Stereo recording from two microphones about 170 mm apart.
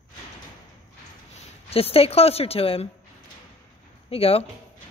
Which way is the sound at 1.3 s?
35° left (ahead or behind).